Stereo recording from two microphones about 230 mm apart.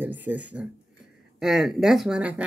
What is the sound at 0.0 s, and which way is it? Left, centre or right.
Speech, centre.